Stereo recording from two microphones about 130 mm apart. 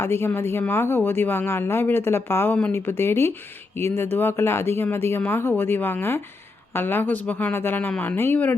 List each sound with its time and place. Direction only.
0.0 s speech: 20° left (ahead or behind)